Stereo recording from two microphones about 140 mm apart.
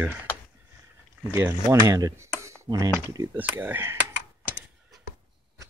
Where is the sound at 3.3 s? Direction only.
15° right (ahead or behind).